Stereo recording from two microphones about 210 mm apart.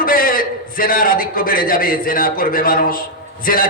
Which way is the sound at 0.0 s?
45° left (ahead or behind).